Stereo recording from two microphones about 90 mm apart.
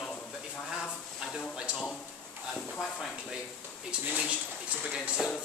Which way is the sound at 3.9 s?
15° right (ahead or behind).